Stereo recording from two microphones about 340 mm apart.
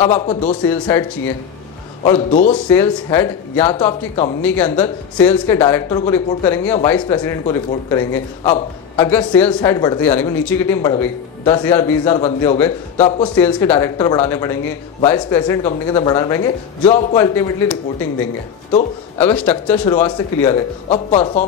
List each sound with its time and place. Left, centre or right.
0.1 s a man's voice: centre
0.5 s speech: centre
2.0 s speech: left
2.5 s a man's voice: centre
12.2 s a man's voice: centre
12.5 s a man's voice: centre
17.2 s a man's voice: centre
19.1 s speech: centre
20.9 s speech: centre